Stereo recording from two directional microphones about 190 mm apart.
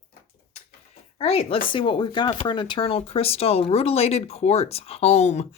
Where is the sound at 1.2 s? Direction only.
30° left (ahead or behind).